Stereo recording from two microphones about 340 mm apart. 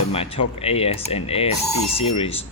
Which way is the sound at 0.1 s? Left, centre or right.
Centre.